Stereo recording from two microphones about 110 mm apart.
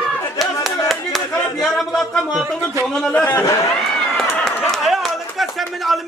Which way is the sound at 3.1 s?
20° left (ahead or behind).